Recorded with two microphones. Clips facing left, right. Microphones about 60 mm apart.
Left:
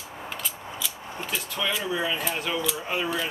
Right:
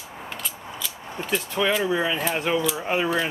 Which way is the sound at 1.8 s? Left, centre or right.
Right.